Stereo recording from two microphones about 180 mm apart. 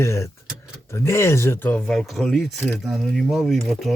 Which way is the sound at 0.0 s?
15° left (ahead or behind).